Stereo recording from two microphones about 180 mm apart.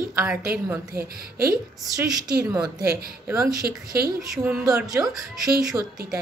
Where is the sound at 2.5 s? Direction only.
20° right (ahead or behind).